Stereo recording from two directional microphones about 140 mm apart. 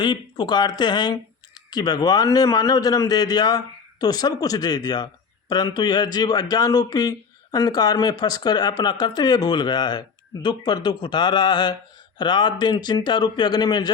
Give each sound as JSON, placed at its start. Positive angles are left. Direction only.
{"t": 0.0, "sound": "a man's voice", "side_deg": 35}